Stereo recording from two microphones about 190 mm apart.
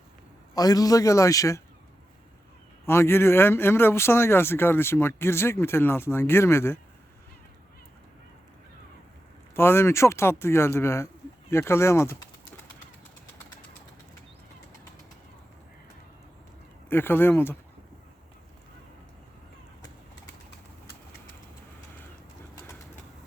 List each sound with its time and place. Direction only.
0.5 s speech: 20° left (ahead or behind)
2.8 s speech: 10° left (ahead or behind)
9.6 s speech: 15° left (ahead or behind)
16.9 s speech: 10° left (ahead or behind)